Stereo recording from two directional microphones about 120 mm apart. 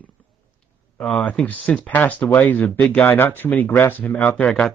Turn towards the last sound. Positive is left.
turn(degrees=10)  # may be behind; listen again after turning